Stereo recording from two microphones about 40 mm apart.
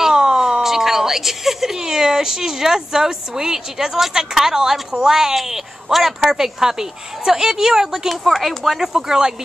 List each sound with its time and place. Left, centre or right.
0.0 s speech: centre
8.1 s speech: centre